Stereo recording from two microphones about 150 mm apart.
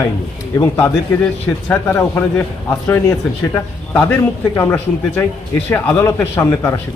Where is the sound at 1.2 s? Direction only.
10° left (ahead or behind).